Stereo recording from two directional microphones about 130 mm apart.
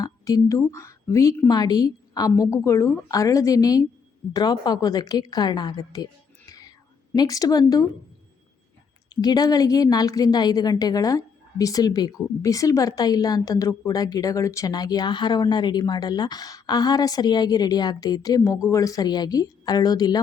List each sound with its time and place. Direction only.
0.0 s a sound: 25° left (ahead or behind)
0.7 s a woman's voice: 20° left (ahead or behind)
9.0 s a woman's voice: 30° left (ahead or behind)